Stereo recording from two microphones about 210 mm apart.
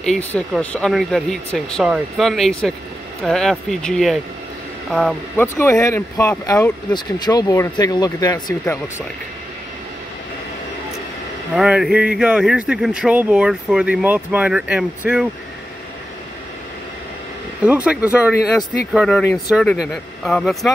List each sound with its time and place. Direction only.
0.0 s speech: 5° left (ahead or behind)
5.6 s speech: 15° left (ahead or behind)
11.5 s speech: 5° right (ahead or behind)
17.6 s speech: 5° right (ahead or behind)
18.9 s speech: 5° left (ahead or behind)